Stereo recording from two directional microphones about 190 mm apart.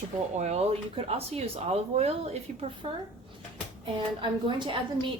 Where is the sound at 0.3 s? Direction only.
35° right (ahead or behind).